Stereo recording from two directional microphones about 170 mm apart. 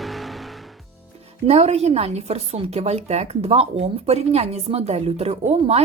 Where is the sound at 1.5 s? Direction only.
40° right (ahead or behind).